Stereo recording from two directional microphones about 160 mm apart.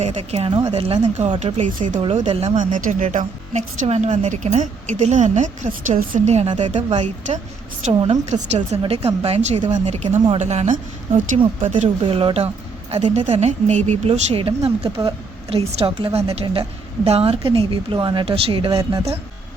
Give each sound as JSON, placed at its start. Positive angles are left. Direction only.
{"t": 0.0, "sound": "speech", "side_deg": -40}
{"t": 2.6, "sound": "speech", "side_deg": -55}
{"t": 8.3, "sound": "speech", "side_deg": -45}